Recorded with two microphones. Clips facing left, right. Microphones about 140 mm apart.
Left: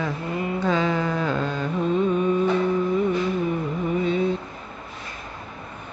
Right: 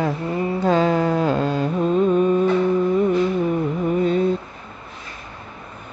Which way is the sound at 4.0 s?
45° right (ahead or behind).